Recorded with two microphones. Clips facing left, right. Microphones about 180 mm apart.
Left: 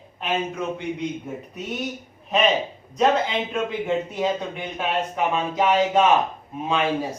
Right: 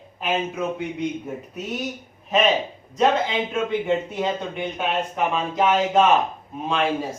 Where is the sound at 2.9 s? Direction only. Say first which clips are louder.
Even; centre (ahead or behind).